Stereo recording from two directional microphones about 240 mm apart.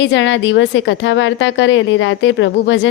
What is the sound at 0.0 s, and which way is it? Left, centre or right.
A woman's voice, left.